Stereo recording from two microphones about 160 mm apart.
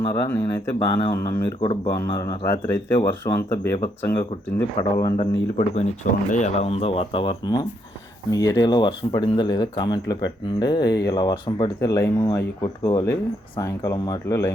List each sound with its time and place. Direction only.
0.0 s speech: 20° left (ahead or behind)
1.6 s speech: 35° left (ahead or behind)
2.0 s speech: 20° left (ahead or behind)
5.2 s speech: 40° left (ahead or behind); by 14.5 s 15° left (ahead or behind)